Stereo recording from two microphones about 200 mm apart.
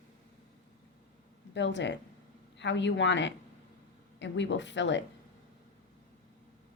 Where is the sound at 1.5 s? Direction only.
65° left (ahead or behind).